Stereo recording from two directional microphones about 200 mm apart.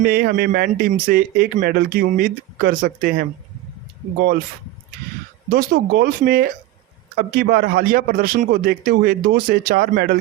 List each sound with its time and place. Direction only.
0.0 s speech: 55° right (ahead or behind)
5.5 s speech: 50° right (ahead or behind)